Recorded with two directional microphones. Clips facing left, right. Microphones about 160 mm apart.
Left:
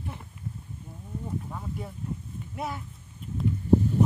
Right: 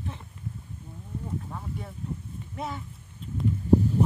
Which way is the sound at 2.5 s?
5° left (ahead or behind).